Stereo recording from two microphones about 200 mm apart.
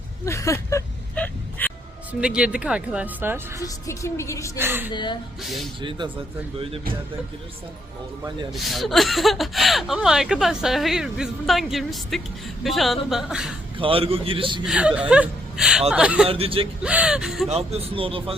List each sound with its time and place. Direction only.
0.3 s whimper: 15° left (ahead or behind)
2.2 s speech: 5° right (ahead or behind)
3.6 s a woman's voice: 15° left (ahead or behind)
4.5 s a woman's voice: 10° right (ahead or behind)
4.9 s speech: 20° left (ahead or behind)
5.4 s speech: centre (ahead or behind)
8.5 s speech: centre (ahead or behind)
13.7 s speech: 25° right (ahead or behind)
14.6 s speech: 5° right (ahead or behind)
16.2 s speech: 30° right (ahead or behind)
16.8 s speech: 5° right (ahead or behind)
17.5 s speech: 30° right (ahead or behind)